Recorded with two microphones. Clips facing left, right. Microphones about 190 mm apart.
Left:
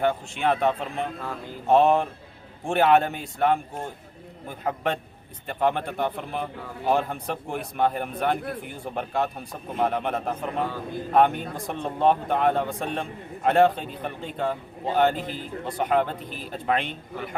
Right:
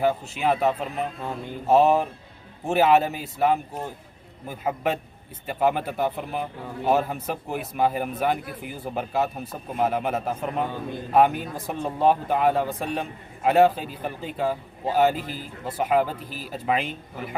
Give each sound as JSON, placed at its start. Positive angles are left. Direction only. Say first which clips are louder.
{"t": 0.0, "sound": "a man's voice", "louder": "right 1 dB", "side_deg": -5}